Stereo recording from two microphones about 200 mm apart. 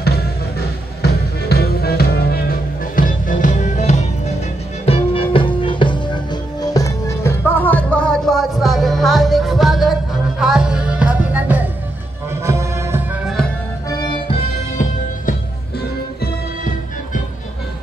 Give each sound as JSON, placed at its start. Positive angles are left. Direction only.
{"t": 0.0, "sound": "music", "side_deg": 50}
{"t": 13.8, "sound": "music", "side_deg": 25}
{"t": 16.2, "sound": "music", "side_deg": 40}